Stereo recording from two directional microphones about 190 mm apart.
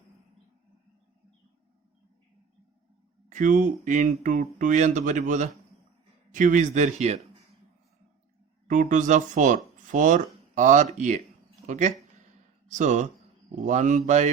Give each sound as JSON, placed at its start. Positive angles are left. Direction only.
{"t": 3.2, "sound": "speech", "side_deg": -40}
{"t": 8.6, "sound": "speech", "side_deg": -40}